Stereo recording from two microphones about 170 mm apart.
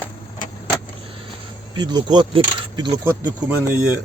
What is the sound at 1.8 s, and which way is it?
Speech, 25° right (ahead or behind).